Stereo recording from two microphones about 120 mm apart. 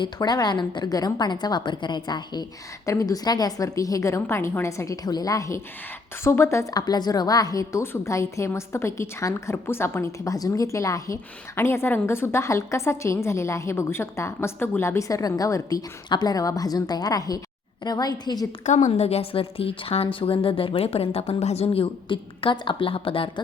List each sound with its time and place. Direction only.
0.0 s a woman's voice: 35° left (ahead or behind)
18.6 s a woman's voice: 85° left; by 23.3 s 50° left (ahead or behind)